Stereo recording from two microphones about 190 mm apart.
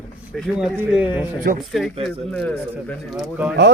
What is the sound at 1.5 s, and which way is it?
Speech, 55° right (ahead or behind).